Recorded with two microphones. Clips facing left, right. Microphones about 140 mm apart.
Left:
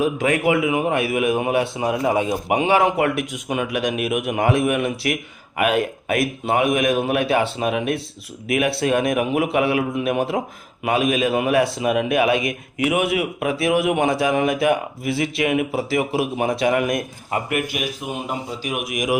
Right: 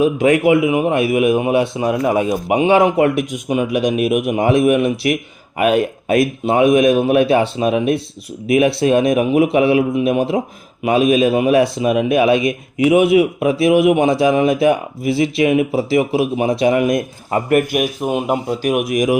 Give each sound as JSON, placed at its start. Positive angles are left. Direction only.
{"t": 0.0, "sound": "a man's voice", "side_deg": -20}
{"t": 1.8, "sound": "a man's voice", "side_deg": 20}
{"t": 2.3, "sound": "a man's voice", "side_deg": -20}
{"t": 17.3, "sound": "a man's voice", "side_deg": -45}